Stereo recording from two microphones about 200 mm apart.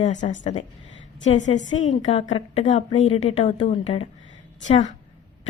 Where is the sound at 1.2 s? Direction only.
70° left (ahead or behind).